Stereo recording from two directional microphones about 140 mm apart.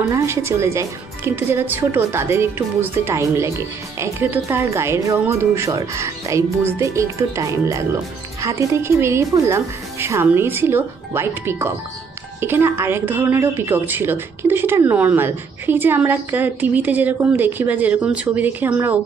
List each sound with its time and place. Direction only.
0.1 s a woman's voice: 20° right (ahead or behind)